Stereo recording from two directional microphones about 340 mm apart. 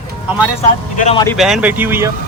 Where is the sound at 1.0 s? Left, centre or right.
Centre.